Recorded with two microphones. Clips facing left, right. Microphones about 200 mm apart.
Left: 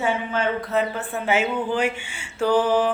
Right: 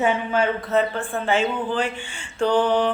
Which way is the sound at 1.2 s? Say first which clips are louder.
Even; 10° left (ahead or behind).